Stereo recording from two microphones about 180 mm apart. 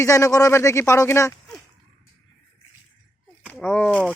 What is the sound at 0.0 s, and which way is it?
Speech, 15° left (ahead or behind).